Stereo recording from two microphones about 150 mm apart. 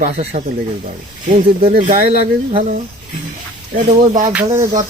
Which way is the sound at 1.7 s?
65° right (ahead or behind).